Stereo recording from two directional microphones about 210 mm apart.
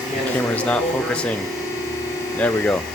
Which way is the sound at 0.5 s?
5° left (ahead or behind).